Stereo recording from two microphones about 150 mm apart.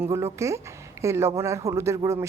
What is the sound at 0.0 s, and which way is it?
A woman's voice, 20° right (ahead or behind).